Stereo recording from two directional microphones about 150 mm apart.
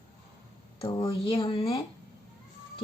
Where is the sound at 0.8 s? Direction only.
35° left (ahead or behind).